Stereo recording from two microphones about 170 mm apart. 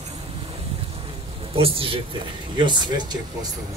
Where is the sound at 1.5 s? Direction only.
35° right (ahead or behind).